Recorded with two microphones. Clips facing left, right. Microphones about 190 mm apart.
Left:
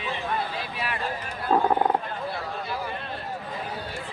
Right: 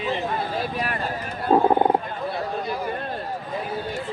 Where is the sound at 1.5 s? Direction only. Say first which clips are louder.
Right 4 dB; 25° right (ahead or behind).